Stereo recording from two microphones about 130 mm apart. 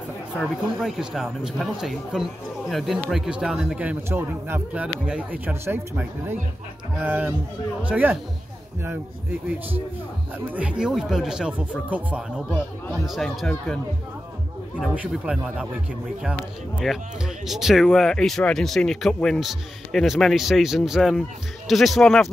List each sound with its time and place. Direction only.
0.4 s a man's voice: centre (ahead or behind)
10.5 s a man's voice: 10° right (ahead or behind)
14.8 s speech: 5° right (ahead or behind)
16.8 s speech: centre (ahead or behind)